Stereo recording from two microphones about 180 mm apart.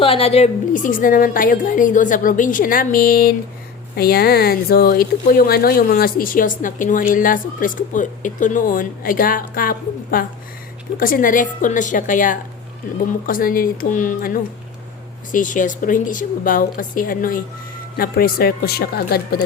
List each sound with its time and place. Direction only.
0.0 s speech: 30° left (ahead or behind); by 19.4 s 60° left (ahead or behind)